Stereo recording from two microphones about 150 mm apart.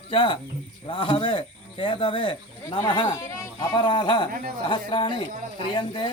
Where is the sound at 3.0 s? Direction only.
20° left (ahead or behind).